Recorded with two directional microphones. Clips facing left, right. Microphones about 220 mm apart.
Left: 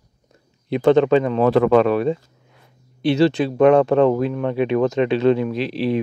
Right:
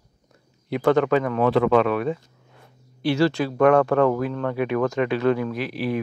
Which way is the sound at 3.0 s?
20° left (ahead or behind).